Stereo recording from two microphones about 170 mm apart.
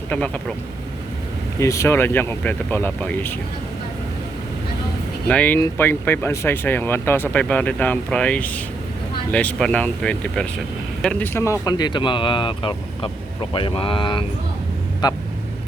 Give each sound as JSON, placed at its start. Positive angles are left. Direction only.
{"t": 1.5, "sound": "speech", "side_deg": 15}
{"t": 5.3, "sound": "speech", "side_deg": 10}